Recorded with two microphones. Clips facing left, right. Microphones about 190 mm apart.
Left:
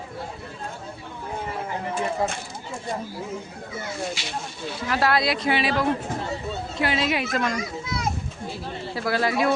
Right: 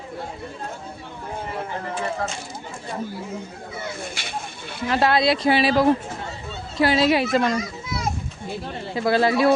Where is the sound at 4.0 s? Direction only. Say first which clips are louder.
Left 2 dB; 55° right (ahead or behind).